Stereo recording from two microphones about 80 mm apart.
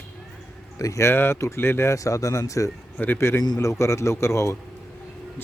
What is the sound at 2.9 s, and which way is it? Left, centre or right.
A man's voice, left.